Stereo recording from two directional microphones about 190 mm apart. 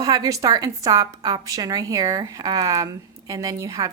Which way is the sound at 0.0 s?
20° right (ahead or behind).